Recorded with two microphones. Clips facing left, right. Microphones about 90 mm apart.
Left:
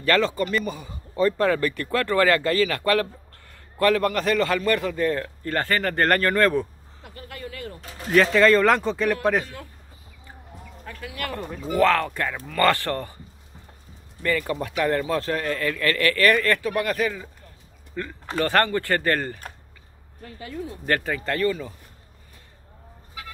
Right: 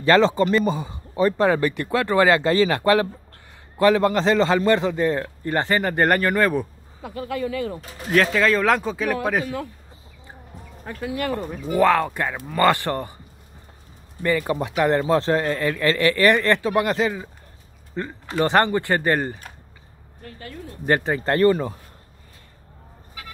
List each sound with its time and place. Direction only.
0.0 s a man's voice: 25° right (ahead or behind)
1.1 s a man's voice: 20° right (ahead or behind)
8.1 s a man's voice: centre (ahead or behind)
10.8 s a man's voice: 25° right (ahead or behind)
14.2 s a man's voice: 20° right (ahead or behind)
20.4 s speech: 15° left (ahead or behind)
20.8 s speech: 25° right (ahead or behind); by 21.7 s 45° right (ahead or behind)
23.2 s vehicle: centre (ahead or behind)